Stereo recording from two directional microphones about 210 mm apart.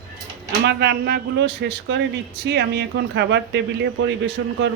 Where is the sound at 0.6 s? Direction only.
50° right (ahead or behind).